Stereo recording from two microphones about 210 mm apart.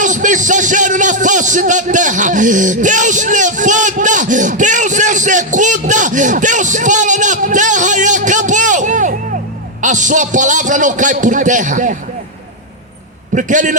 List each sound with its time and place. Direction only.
0.0 s a man's voice: 35° right (ahead or behind)
13.3 s a man's voice: 35° right (ahead or behind)